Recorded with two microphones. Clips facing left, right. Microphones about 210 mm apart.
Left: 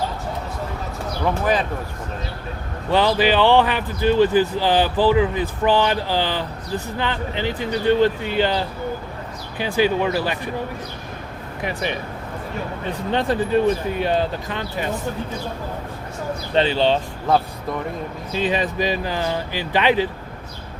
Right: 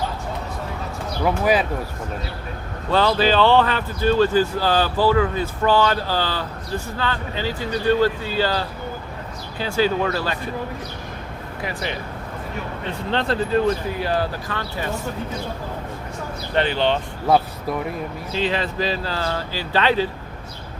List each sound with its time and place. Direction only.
1.2 s speech: 10° right (ahead or behind)
2.9 s speech: 15° left (ahead or behind)
11.6 s speech: 20° left (ahead or behind)
13.1 s speech: 15° left (ahead or behind)
18.3 s speech: 15° left (ahead or behind)